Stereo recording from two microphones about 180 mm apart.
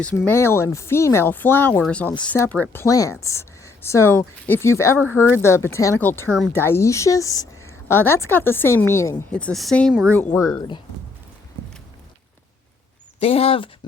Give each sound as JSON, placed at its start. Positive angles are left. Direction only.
{"t": 0.3, "sound": "speech", "side_deg": 15}
{"t": 10.1, "sound": "speech", "side_deg": 10}
{"t": 13.1, "sound": "speech", "side_deg": 35}